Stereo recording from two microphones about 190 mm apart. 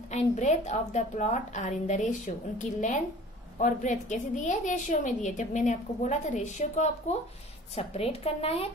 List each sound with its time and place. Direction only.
0.1 s a woman's voice: 35° left (ahead or behind)